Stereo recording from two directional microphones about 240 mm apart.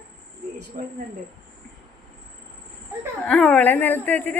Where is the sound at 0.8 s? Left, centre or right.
Right.